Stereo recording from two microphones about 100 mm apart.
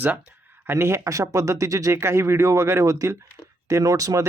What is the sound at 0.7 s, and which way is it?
Speech, 25° right (ahead or behind).